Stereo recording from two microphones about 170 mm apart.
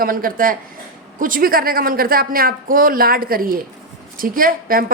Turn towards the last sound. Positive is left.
turn(degrees=-55)  # may be behind; listen again after turning